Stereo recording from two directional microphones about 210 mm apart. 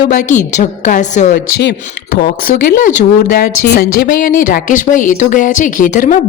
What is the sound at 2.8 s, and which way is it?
Speech, 40° left (ahead or behind).